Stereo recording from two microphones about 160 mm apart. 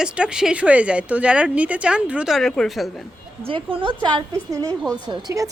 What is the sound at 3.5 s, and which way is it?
A woman's voice, 35° right (ahead or behind).